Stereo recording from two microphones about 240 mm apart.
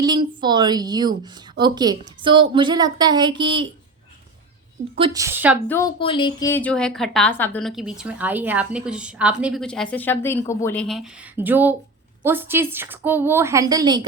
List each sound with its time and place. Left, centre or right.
0.0 s a woman's voice: centre
4.9 s a woman's voice: centre
5.6 s a woman's voice: centre
6.0 s speech: left
6.5 s a woman's voice: centre